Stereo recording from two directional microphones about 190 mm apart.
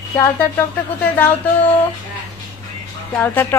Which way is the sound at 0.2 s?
10° left (ahead or behind).